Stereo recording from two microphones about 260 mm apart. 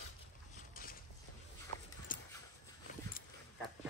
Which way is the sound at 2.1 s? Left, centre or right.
Left.